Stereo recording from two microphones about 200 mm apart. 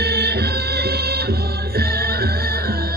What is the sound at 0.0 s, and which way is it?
Music, 55° right (ahead or behind).